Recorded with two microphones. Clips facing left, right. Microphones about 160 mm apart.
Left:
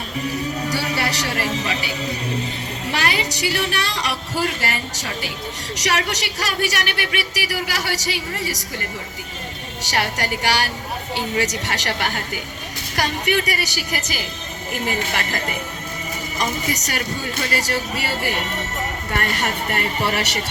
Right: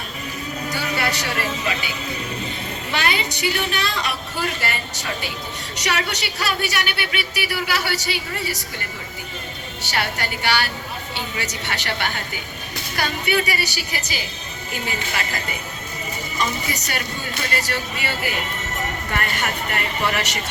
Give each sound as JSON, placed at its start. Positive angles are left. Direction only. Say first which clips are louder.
{"t": 0.7, "sound": "a woman's voice", "louder": "right 2 dB", "side_deg": 35}
{"t": 9.8, "sound": "a woman's voice", "louder": "left 2 dB", "side_deg": 40}
{"t": 16.4, "sound": "a woman's voice", "louder": "left 1 dB", "side_deg": 45}